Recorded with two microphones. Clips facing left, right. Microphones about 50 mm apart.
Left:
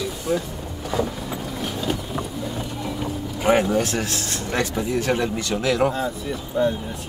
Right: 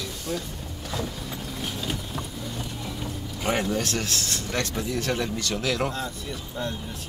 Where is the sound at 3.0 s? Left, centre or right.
Centre.